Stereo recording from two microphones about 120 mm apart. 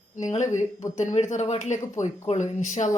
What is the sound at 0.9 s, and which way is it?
Speech, 75° left (ahead or behind).